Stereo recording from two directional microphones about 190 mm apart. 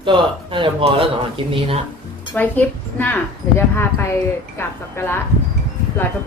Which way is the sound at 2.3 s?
10° left (ahead or behind).